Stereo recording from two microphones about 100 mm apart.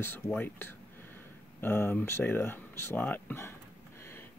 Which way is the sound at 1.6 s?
25° left (ahead or behind).